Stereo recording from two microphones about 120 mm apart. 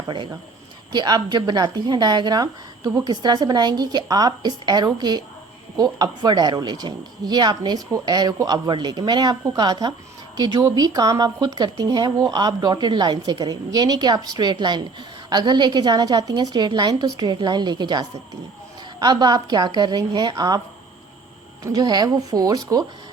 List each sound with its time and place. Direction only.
0.9 s a woman's voice: 35° right (ahead or behind)
21.6 s a woman's voice: 30° right (ahead or behind)